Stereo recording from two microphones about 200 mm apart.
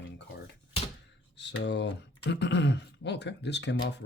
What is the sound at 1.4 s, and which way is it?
Speech, 60° left (ahead or behind).